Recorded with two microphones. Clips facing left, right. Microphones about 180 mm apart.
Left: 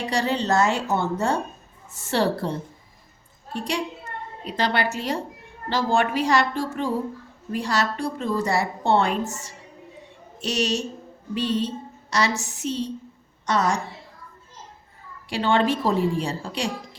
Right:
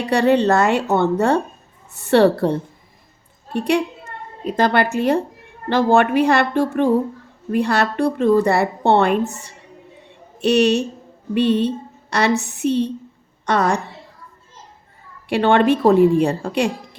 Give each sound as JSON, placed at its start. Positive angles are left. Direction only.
{"t": 0.1, "sound": "a woman's voice", "side_deg": -60}
{"t": 4.4, "sound": "a woman's voice", "side_deg": -50}
{"t": 15.3, "sound": "a woman's voice", "side_deg": -60}